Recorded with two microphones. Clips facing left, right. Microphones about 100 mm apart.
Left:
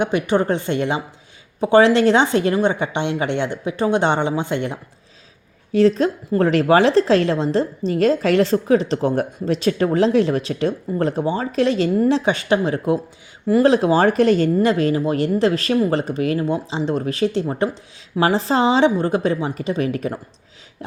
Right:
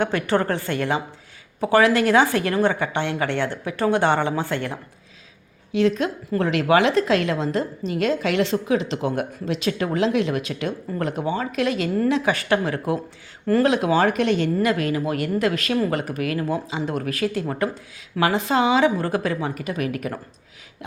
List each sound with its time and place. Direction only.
0.0 s a woman's voice: 20° left (ahead or behind)
5.7 s a woman's voice: 35° left (ahead or behind)